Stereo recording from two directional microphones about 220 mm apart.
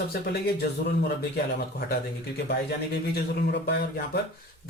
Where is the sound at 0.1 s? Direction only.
45° left (ahead or behind).